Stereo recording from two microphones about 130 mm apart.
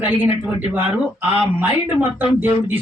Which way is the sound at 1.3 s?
15° right (ahead or behind).